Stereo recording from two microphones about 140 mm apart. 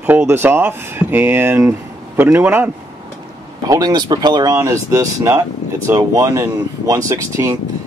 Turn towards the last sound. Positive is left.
turn(degrees=-20)  # may be behind; listen again after turning